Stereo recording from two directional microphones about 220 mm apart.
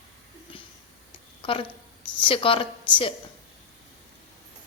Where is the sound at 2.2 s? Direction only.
25° left (ahead or behind).